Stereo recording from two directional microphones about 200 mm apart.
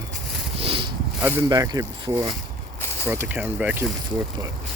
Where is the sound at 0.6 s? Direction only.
25° right (ahead or behind).